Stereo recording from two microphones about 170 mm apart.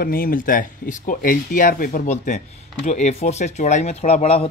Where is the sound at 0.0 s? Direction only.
60° left (ahead or behind).